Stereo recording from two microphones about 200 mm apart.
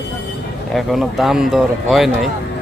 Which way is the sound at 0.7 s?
Centre (ahead or behind).